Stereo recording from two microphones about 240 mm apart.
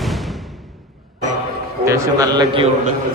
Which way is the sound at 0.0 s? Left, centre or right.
Centre.